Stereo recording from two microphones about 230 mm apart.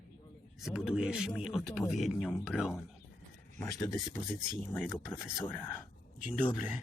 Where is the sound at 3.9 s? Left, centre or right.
Centre.